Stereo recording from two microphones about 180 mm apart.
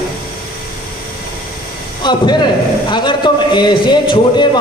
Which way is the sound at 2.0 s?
25° left (ahead or behind).